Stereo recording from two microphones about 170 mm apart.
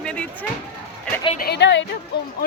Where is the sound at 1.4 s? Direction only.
90° left.